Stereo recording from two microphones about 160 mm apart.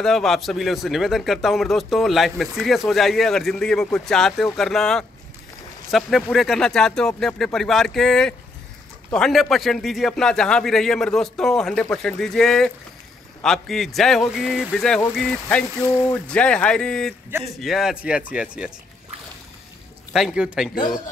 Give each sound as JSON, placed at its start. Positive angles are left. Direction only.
{"t": 0.0, "sound": "speech", "side_deg": 0}
{"t": 20.1, "sound": "speech", "side_deg": -5}